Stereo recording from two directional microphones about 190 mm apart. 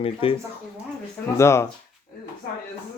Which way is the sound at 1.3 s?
15° left (ahead or behind).